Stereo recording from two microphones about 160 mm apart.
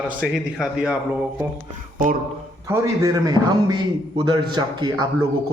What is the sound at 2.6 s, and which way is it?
A man's voice, 20° right (ahead or behind).